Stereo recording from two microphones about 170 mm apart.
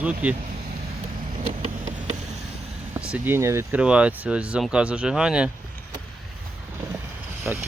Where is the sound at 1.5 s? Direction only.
45° right (ahead or behind).